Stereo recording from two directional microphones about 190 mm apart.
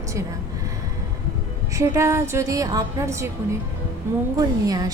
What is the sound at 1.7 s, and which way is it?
A woman's voice, 15° right (ahead or behind).